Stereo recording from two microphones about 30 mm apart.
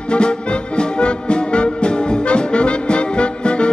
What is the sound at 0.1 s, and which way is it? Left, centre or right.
Music, left.